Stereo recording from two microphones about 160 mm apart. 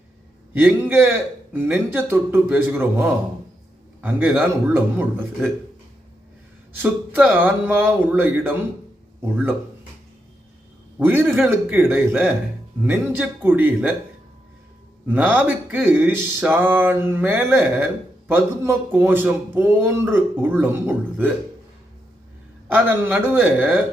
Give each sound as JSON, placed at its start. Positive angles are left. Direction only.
{"t": 0.5, "sound": "speech", "side_deg": -10}
{"t": 6.8, "sound": "speech", "side_deg": -10}
{"t": 11.0, "sound": "speech", "side_deg": -15}
{"t": 15.0, "sound": "speech", "side_deg": -10}
{"t": 22.7, "sound": "speech", "side_deg": -10}